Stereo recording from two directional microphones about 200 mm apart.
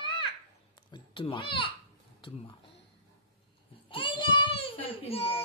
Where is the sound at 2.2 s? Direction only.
25° left (ahead or behind).